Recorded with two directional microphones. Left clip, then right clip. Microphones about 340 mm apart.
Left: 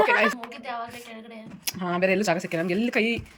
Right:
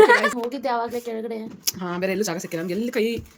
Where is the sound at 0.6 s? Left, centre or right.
Centre.